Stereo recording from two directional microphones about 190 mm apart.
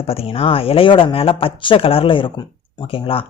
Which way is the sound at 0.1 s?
30° left (ahead or behind).